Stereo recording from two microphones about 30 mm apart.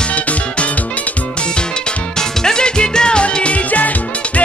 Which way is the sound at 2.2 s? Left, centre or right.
Left.